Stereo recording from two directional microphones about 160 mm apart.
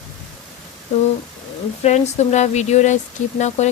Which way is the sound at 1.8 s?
45° left (ahead or behind).